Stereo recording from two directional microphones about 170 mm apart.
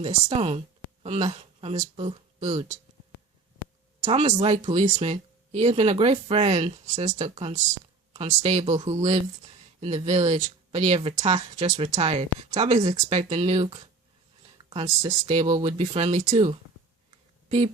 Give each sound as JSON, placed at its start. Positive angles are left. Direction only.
{"t": 0.0, "sound": "speech", "side_deg": -35}
{"t": 4.0, "sound": "speech", "side_deg": -40}
{"t": 15.4, "sound": "speech", "side_deg": -30}
{"t": 17.1, "sound": "a sound", "side_deg": -40}